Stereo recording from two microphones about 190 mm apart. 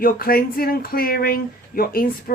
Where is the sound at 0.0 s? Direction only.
50° left (ahead or behind).